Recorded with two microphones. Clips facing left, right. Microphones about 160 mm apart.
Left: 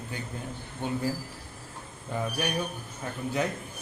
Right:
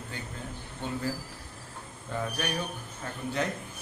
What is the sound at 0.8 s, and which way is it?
Speech, 15° left (ahead or behind).